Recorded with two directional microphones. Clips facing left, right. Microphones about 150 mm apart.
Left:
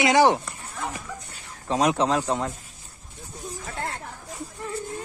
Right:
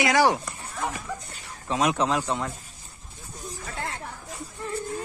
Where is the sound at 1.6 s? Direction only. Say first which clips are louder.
Left 2 dB; 35° left (ahead or behind).